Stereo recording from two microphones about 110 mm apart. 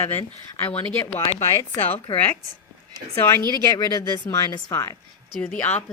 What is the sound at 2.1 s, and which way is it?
Speech, 15° left (ahead or behind).